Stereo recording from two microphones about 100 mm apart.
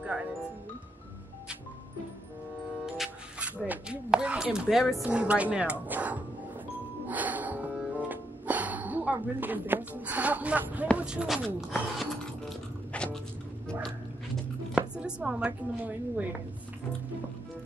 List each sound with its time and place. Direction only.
0.0 s music: 10° right (ahead or behind)
3.3 s a woman's voice: 15° right (ahead or behind)
7.1 s music: 15° right (ahead or behind)
8.1 s a woman's voice: 15° right (ahead or behind); by 12.5 s centre (ahead or behind)
12.9 s a sound: 10° left (ahead or behind)
14.8 s speech: 10° right (ahead or behind)